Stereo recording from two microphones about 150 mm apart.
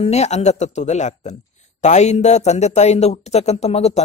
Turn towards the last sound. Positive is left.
turn(degrees=45)  # may be behind; listen again after turning